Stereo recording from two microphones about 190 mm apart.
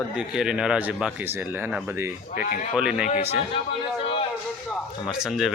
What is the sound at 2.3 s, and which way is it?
Speech, 45° left (ahead or behind).